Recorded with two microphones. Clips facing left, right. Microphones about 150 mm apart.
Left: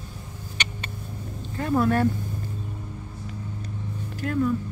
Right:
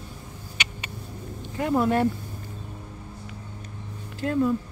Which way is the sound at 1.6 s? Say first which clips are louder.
Even; 20° right (ahead or behind).